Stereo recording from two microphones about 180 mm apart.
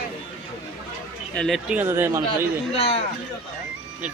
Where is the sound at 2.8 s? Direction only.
35° left (ahead or behind).